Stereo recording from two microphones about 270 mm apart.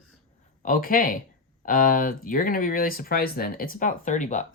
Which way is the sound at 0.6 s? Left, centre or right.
Left.